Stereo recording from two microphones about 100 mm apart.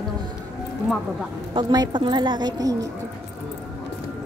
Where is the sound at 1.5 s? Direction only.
45° right (ahead or behind).